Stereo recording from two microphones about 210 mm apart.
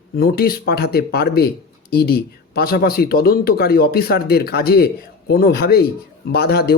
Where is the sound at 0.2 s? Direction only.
45° left (ahead or behind).